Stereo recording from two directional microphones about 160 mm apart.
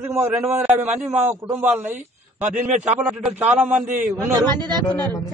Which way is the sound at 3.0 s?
5° right (ahead or behind).